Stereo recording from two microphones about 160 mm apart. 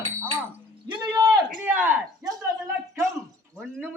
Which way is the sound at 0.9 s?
25° right (ahead or behind).